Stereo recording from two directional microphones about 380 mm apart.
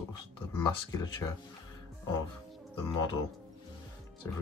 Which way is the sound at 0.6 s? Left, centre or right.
Centre.